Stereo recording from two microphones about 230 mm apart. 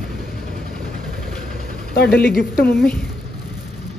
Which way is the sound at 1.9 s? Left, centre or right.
Left.